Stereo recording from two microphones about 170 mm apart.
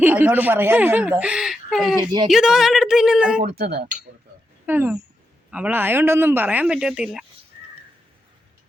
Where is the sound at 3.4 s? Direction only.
65° right (ahead or behind).